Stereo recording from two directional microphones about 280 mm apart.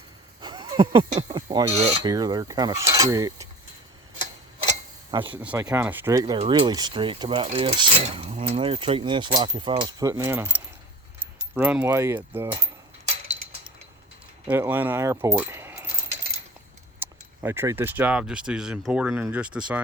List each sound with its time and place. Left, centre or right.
0.4 s speech: centre
5.4 s speech: centre
14.4 s speech: centre
17.0 s speech: centre